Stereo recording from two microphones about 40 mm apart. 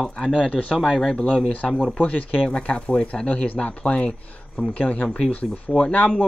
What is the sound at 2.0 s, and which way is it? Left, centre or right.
Speech, left.